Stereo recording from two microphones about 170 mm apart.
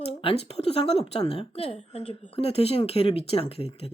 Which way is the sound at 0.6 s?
35° left (ahead or behind).